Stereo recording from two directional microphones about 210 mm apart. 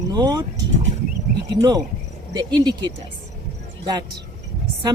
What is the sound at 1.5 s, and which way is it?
Speech, 20° right (ahead or behind).